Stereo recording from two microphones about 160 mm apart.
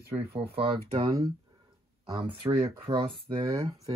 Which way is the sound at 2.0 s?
30° right (ahead or behind).